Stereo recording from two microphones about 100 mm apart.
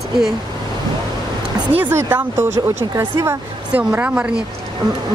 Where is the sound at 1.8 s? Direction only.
20° right (ahead or behind).